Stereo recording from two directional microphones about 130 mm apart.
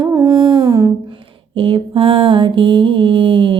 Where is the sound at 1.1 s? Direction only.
40° right (ahead or behind).